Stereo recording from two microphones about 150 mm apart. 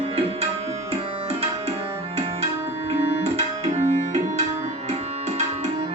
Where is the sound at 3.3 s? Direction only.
45° right (ahead or behind).